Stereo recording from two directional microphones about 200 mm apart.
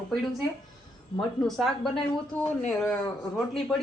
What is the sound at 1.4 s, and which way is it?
Speech, centre (ahead or behind).